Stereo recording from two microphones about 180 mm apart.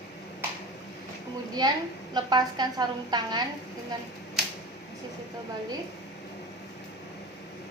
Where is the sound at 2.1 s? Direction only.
25° right (ahead or behind).